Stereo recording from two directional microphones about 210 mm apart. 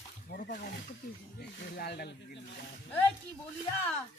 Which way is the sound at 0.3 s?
45° left (ahead or behind).